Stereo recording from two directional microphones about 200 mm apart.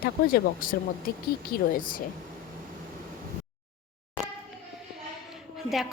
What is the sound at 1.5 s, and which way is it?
Speech, 45° left (ahead or behind).